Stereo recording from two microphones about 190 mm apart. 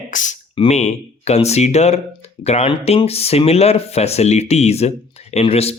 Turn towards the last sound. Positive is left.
turn(degrees=30)  # may be behind; listen again after turning